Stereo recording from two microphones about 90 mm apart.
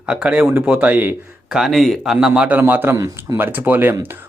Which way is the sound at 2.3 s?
15° right (ahead or behind).